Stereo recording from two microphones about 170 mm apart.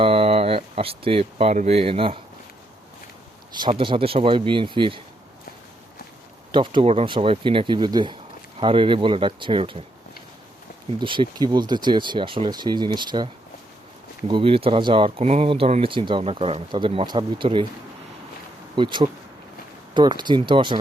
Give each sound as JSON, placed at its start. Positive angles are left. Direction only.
{"t": 0.0, "sound": "speech", "side_deg": -35}
{"t": 3.5, "sound": "speech", "side_deg": -30}
{"t": 6.5, "sound": "speech", "side_deg": -30}
{"t": 11.0, "sound": "speech", "side_deg": -30}
{"t": 18.8, "sound": "speech", "side_deg": -30}